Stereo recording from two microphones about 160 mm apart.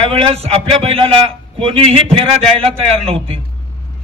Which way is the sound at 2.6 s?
35° right (ahead or behind).